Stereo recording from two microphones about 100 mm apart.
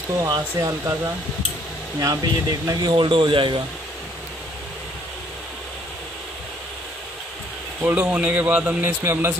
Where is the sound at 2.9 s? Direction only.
55° right (ahead or behind).